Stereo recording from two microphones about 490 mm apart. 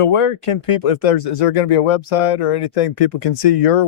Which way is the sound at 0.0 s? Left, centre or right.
Left.